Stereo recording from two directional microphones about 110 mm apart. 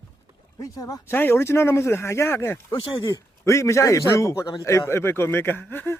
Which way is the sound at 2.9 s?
40° left (ahead or behind).